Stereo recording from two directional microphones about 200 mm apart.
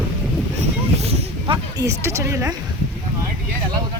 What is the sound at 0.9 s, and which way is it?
Speech, 30° right (ahead or behind).